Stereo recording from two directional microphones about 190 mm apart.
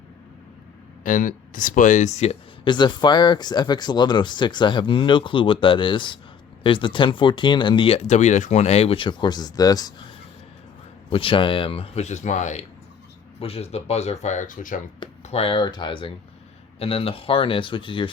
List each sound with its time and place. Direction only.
1.0 s speech: 45° left (ahead or behind)
2.6 s speech: 25° left (ahead or behind)
11.1 s speech: 30° left (ahead or behind); by 14.8 s 45° left (ahead or behind)
15.0 s speech: 30° left (ahead or behind)